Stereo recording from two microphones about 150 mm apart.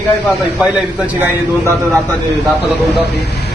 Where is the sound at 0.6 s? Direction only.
10° right (ahead or behind).